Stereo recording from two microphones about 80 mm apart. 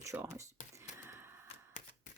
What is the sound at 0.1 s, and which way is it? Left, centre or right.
Speech, right.